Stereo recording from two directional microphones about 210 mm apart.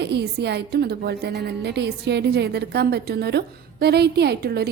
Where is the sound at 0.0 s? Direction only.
50° right (ahead or behind).